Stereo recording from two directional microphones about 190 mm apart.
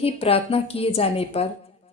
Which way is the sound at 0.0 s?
30° left (ahead or behind).